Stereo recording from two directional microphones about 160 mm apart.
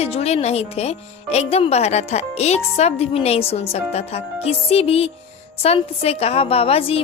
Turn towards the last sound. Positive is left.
turn(degrees=35)  # may be behind; listen again after turning